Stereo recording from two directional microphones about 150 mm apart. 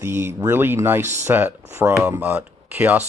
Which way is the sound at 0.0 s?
15° right (ahead or behind).